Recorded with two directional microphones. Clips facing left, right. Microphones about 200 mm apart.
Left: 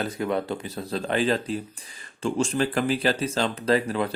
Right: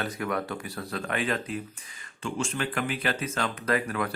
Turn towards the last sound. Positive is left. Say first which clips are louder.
# left 5 dB
turn(degrees=25)  # may be behind; listen again after turning